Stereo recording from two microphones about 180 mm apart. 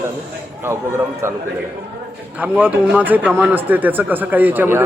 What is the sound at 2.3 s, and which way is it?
A man's voice, 10° right (ahead or behind).